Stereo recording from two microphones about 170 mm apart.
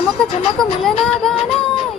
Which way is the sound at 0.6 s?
Centre (ahead or behind).